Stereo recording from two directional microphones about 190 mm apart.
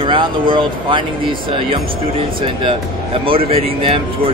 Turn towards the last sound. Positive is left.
turn(degrees=-30)  # may be behind; listen again after turning